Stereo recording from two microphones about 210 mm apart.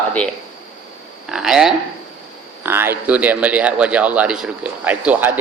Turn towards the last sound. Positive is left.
turn(degrees=-10)  # may be behind; listen again after turning